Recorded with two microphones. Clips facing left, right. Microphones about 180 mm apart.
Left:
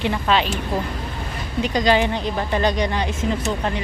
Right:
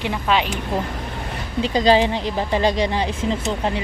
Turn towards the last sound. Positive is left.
turn(degrees=-30)  # may be behind; listen again after turning